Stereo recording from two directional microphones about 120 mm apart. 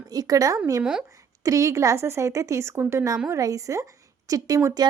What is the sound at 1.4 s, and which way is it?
A woman's voice, 25° right (ahead or behind).